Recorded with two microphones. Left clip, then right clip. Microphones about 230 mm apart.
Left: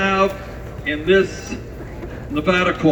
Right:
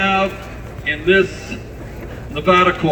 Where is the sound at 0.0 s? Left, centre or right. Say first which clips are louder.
Right 1 dB; centre.